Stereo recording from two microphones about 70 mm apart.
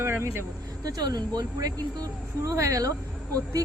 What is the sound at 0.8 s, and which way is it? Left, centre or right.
Speech, right.